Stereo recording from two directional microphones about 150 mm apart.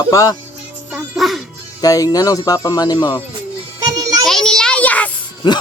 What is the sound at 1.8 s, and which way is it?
Speech, 25° left (ahead or behind).